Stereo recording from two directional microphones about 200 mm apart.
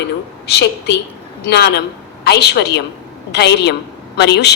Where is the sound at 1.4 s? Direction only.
55° left (ahead or behind).